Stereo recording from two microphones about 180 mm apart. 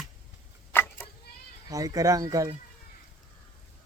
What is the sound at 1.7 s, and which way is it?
Speech, 20° right (ahead or behind).